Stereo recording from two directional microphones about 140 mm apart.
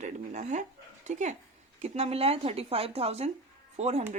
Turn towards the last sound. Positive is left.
turn(degrees=-50)  # may be behind; listen again after turning